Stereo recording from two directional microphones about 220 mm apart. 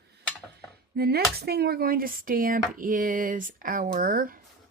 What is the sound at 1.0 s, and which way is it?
Speech, 45° right (ahead or behind).